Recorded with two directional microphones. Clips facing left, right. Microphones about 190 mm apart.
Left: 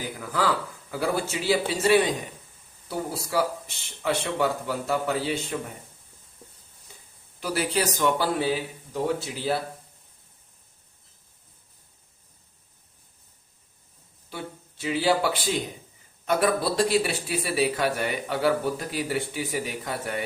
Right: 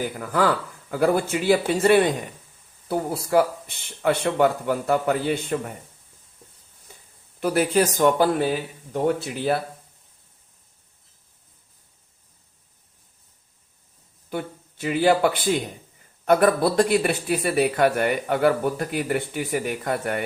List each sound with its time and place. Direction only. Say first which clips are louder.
0.2 s speech: right 3 dB; 50° right (ahead or behind)
7.3 s speech: right 6 dB; 50° right (ahead or behind)
14.3 s speech: right 7 dB; 55° right (ahead or behind)